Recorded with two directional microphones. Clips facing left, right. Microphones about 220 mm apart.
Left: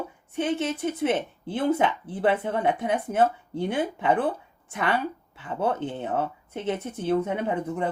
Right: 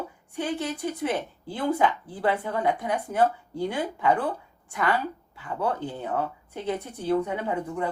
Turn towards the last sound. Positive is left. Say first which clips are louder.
# left 2 dB
turn(degrees=20)  # may be behind; listen again after turning